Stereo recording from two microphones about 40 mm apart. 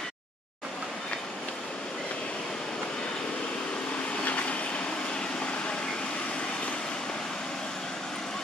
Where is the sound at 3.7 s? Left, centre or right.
Left.